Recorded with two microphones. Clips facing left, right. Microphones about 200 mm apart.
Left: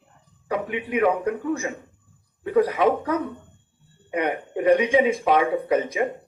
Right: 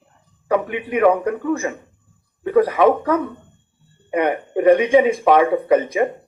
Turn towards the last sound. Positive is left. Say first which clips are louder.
# right 5 dB
turn(degrees=-55)  # may be behind; listen again after turning